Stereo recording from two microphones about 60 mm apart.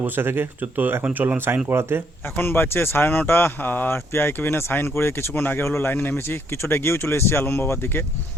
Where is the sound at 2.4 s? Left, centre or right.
Left.